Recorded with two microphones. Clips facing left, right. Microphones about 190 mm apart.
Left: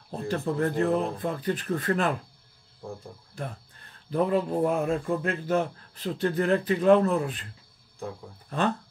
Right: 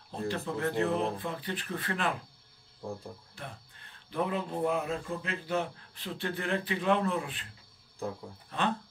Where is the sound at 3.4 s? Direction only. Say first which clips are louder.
Left 8 dB; 45° left (ahead or behind).